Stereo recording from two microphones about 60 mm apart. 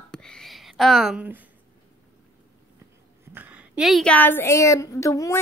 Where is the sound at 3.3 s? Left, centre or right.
Right.